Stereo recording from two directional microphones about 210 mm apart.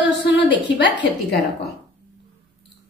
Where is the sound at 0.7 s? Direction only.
60° left (ahead or behind).